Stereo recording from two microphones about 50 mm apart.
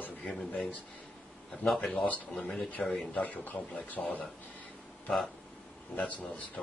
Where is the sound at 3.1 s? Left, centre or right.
Left.